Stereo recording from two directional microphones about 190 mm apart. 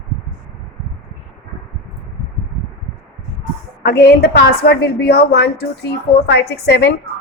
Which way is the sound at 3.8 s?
55° left (ahead or behind).